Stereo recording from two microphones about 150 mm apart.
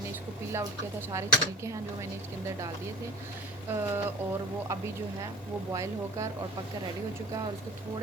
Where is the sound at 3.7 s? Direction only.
15° right (ahead or behind).